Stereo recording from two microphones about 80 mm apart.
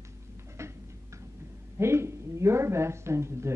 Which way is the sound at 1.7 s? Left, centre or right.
Right.